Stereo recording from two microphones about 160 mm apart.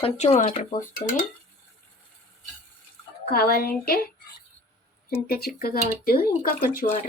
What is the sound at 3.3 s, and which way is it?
Speech, 70° left (ahead or behind).